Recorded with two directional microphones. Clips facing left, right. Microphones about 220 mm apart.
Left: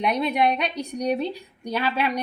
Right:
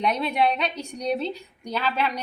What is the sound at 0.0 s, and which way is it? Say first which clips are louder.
A woman's voice: left 1 dB; 10° left (ahead or behind).